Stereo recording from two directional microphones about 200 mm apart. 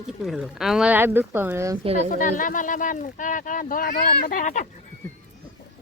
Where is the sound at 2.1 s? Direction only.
40° left (ahead or behind).